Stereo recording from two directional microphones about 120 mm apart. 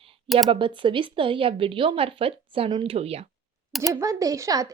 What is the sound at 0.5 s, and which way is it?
A woman's voice, 45° right (ahead or behind).